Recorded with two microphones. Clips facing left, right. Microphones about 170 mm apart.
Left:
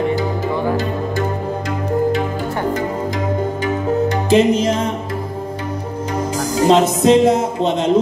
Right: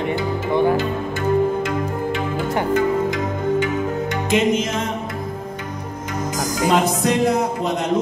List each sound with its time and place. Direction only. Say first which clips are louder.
3.5 s music: left 2 dB; 35° left (ahead or behind)
6.5 s speech: left 5 dB; 25° left (ahead or behind)